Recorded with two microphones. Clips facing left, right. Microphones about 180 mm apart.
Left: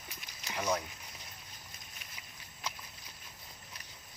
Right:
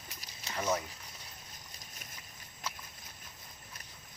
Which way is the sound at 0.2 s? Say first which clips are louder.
Even; 40° right (ahead or behind).